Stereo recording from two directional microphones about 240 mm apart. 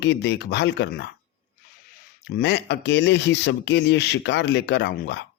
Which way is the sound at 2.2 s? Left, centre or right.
Left.